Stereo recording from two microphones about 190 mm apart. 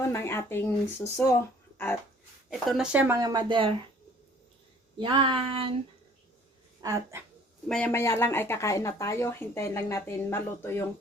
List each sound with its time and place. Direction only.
0.0 s speech: 15° left (ahead or behind)
2.5 s speech: centre (ahead or behind)
3.2 s a sound: 20° right (ahead or behind)
4.9 s a sound: 25° right (ahead or behind)
6.8 s speech: 15° right (ahead or behind)
7.7 s speech: 10° left (ahead or behind)